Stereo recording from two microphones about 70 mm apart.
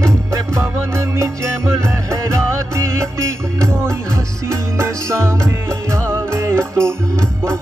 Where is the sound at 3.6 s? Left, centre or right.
Right.